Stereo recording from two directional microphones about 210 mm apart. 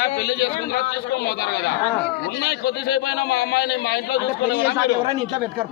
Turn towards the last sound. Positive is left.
turn(degrees=50)  # may be behind; listen again after turning